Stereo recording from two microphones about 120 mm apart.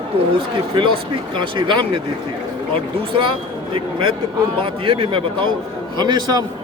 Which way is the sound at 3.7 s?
45° right (ahead or behind).